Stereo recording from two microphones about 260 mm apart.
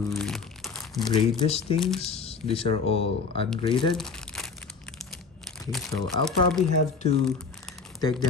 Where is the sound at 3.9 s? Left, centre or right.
Centre.